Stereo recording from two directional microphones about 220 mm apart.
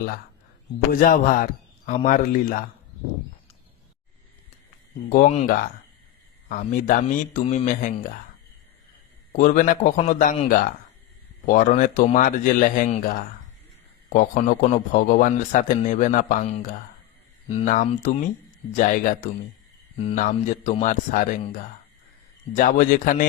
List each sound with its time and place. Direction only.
1.0 s speech: 35° left (ahead or behind)
5.0 s speech: 35° left (ahead or behind)
9.3 s speech: 35° left (ahead or behind)
22.5 s speech: 40° left (ahead or behind)